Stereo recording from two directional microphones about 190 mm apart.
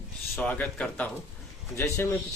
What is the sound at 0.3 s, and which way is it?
Speech, 10° left (ahead or behind).